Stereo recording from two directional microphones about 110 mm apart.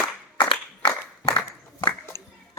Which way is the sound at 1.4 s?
45° left (ahead or behind).